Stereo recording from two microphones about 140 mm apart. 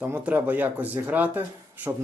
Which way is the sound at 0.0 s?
10° right (ahead or behind).